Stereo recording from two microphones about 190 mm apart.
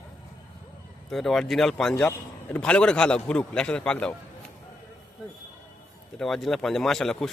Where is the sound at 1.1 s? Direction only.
Centre (ahead or behind).